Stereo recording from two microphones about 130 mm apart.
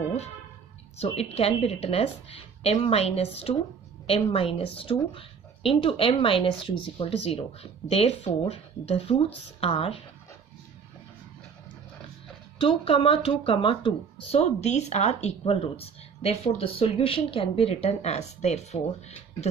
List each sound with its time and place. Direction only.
0.9 s speech: 50° left (ahead or behind)
12.5 s speech: 45° left (ahead or behind)